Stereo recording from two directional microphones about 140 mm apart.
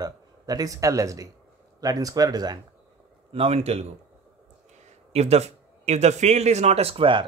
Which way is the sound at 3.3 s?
45° right (ahead or behind).